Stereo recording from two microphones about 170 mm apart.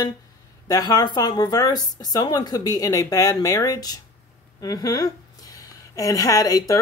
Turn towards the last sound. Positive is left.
turn(degrees=20)  # may be behind; listen again after turning